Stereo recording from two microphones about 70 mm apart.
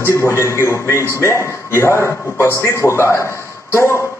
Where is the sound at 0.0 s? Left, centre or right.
Left.